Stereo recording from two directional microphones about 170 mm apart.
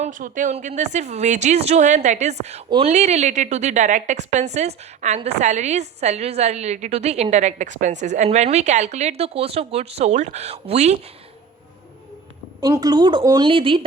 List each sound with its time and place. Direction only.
0.0 s a woman's voice: 50° right (ahead or behind)
12.5 s a woman's voice: 25° right (ahead or behind)